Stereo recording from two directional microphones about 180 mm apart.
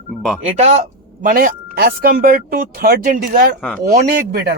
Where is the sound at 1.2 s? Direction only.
50° right (ahead or behind).